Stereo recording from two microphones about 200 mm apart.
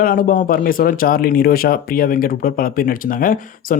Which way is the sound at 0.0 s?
45° left (ahead or behind).